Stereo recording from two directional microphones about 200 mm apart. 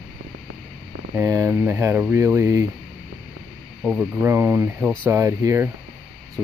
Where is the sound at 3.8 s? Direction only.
5° right (ahead or behind).